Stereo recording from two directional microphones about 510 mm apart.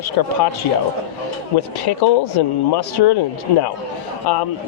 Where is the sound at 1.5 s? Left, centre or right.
Left.